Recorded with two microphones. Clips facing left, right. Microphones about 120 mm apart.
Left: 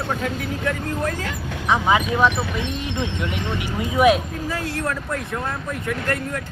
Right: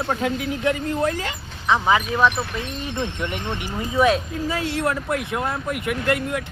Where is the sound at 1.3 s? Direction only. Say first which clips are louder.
Left 8 dB; 70° left (ahead or behind).